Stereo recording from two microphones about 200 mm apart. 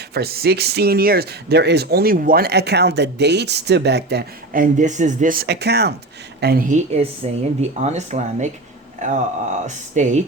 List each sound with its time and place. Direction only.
0.1 s speech: 50° right (ahead or behind)